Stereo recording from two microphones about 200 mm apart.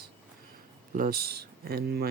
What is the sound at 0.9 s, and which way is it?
Speech, 45° right (ahead or behind).